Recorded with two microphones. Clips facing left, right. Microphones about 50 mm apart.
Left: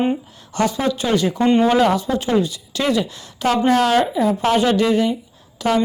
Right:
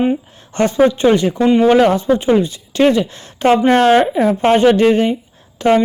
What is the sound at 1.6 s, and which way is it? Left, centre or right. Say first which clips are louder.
Speech: right 5 dB; right.